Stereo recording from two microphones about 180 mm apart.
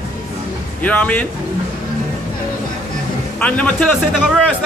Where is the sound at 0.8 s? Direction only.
10° left (ahead or behind).